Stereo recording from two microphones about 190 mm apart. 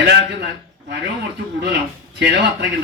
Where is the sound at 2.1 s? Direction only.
65° right (ahead or behind).